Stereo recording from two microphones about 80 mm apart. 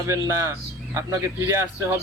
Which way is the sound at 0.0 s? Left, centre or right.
Right.